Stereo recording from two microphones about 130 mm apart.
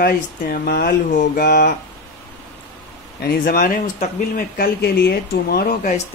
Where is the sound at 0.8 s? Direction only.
85° left.